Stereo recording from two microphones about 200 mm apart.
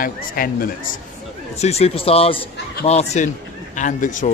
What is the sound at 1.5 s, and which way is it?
Speech, 35° left (ahead or behind).